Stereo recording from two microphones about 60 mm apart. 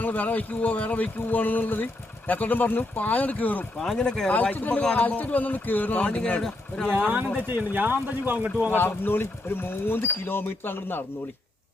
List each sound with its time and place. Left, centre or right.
0.0 s speech: left
3.8 s speech: centre
4.8 s speech: left
6.4 s speech: centre
7.0 s speech: right
8.7 s speech: left